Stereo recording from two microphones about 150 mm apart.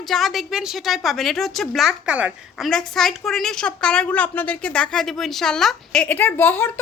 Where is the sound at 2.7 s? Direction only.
5° left (ahead or behind).